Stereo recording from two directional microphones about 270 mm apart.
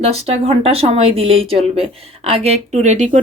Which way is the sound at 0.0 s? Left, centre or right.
Right.